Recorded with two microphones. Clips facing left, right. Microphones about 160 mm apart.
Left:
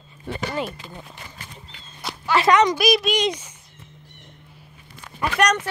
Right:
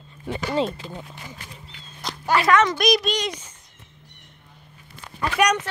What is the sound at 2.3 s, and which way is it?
Speech, 20° left (ahead or behind).